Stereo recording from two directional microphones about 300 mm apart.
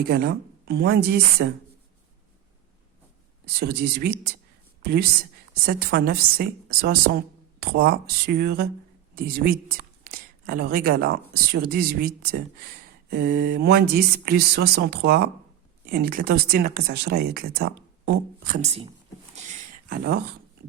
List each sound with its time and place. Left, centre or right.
0.1 s speech: right
3.4 s a woman's voice: right
19.5 s a sound: right